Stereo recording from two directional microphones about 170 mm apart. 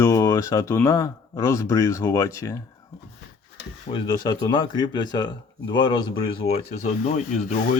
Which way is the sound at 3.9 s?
30° left (ahead or behind).